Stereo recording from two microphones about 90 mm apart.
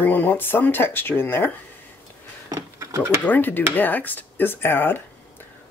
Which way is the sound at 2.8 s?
30° right (ahead or behind).